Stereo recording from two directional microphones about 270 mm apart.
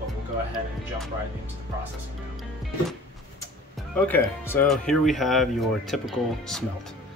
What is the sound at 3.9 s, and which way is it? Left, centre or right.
Speech, centre.